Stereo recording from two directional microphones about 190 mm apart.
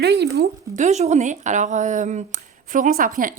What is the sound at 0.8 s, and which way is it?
Speech, 35° right (ahead or behind).